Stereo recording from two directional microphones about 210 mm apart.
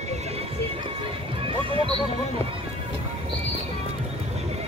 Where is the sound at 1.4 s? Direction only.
25° right (ahead or behind).